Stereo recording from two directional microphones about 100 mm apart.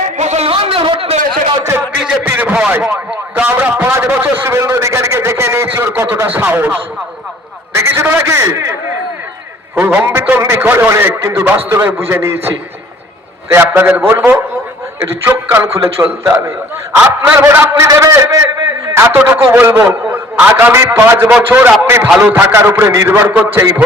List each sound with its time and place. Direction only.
0.2 s a sound: 80° right
2.2 s a sound: 20° right (ahead or behind)
3.3 s a man's voice: 15° right (ahead or behind)
7.8 s a man's voice: 20° right (ahead or behind)
9.8 s a man's voice: 20° right (ahead or behind)
13.5 s a man's voice: 20° right (ahead or behind)
17.4 s a man's voice: 30° right (ahead or behind)